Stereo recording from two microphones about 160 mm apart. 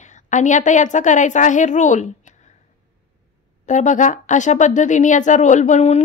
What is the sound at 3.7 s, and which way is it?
A woman's voice, 50° left (ahead or behind).